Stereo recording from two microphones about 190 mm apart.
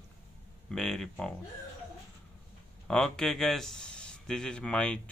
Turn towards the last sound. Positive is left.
turn(degrees=5)  # may be behind; listen again after turning